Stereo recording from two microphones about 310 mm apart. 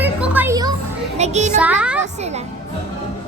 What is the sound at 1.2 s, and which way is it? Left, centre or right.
Speech, right.